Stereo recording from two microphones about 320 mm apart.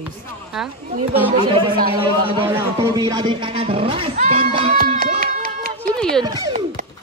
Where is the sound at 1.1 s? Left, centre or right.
Centre.